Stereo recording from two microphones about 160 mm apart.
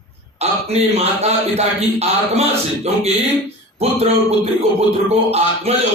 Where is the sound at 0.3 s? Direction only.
40° right (ahead or behind).